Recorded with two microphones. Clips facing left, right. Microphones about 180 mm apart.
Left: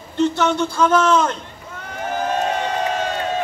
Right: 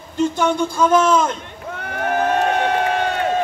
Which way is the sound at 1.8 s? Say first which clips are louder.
Right 4 dB; 65° right (ahead or behind).